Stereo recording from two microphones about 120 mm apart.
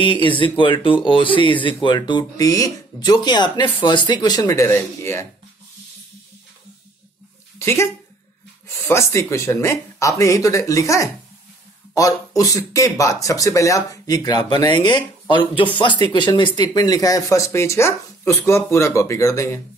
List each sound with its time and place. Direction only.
0.0 s speech: 45° left (ahead or behind); by 5.2 s 20° left (ahead or behind)
7.5 s speech: 20° left (ahead or behind)